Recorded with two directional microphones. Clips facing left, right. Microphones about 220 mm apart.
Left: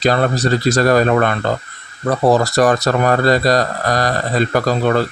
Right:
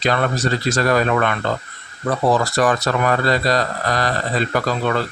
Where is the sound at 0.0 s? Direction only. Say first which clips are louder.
Left 4 dB; 35° left (ahead or behind).